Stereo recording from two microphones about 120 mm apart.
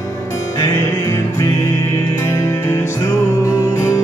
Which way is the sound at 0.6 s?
25° left (ahead or behind).